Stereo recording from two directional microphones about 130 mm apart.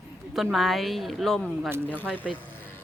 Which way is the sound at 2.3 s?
15° left (ahead or behind).